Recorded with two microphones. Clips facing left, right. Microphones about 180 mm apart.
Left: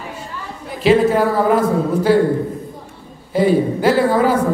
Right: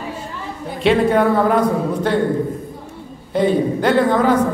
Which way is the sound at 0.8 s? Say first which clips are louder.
Left 1 dB; 5° left (ahead or behind).